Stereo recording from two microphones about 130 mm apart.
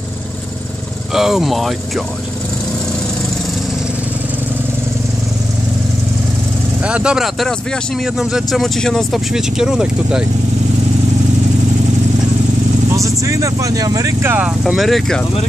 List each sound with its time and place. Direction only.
1.1 s speech: 5° right (ahead or behind)
6.8 s speech: 10° right (ahead or behind)
12.9 s speech: 25° right (ahead or behind)
14.7 s speech: centre (ahead or behind)